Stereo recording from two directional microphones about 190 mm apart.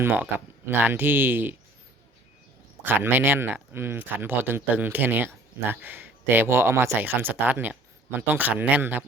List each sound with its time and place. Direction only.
0.0 s speech: 10° right (ahead or behind)
2.8 s speech: 10° right (ahead or behind)